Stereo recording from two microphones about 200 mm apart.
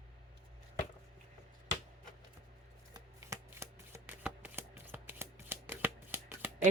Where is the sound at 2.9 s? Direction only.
15° right (ahead or behind).